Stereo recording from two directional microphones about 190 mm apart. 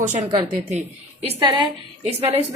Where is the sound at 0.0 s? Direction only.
40° right (ahead or behind).